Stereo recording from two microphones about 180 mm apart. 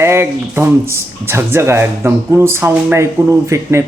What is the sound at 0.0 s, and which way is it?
Speech, 15° right (ahead or behind).